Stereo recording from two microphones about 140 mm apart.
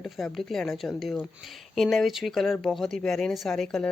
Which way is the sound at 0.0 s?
Centre (ahead or behind).